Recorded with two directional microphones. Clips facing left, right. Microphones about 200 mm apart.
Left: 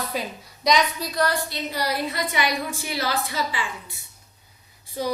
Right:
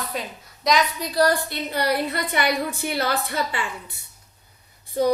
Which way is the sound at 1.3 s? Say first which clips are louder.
Right 3 dB; 55° right (ahead or behind).